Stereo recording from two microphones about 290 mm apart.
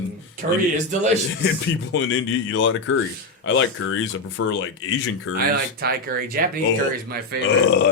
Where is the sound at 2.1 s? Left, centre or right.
Left.